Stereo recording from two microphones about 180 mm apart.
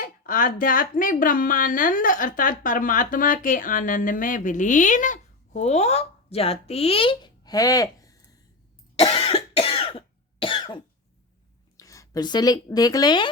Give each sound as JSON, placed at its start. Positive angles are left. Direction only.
{"t": 0.0, "sound": "a woman's voice", "side_deg": 50}
{"t": 9.0, "sound": "cough", "side_deg": 35}
{"t": 11.8, "sound": "a woman's voice", "side_deg": 20}